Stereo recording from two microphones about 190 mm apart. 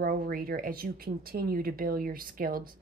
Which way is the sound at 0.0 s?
50° right (ahead or behind).